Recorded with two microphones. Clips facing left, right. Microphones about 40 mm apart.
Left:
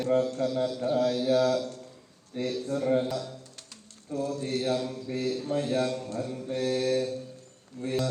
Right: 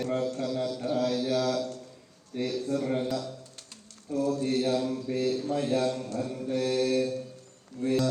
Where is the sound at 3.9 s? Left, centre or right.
Left.